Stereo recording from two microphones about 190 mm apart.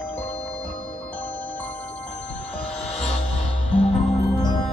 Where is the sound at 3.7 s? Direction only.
30° left (ahead or behind).